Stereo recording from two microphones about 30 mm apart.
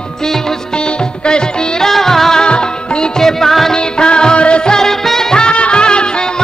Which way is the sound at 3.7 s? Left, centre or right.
Left.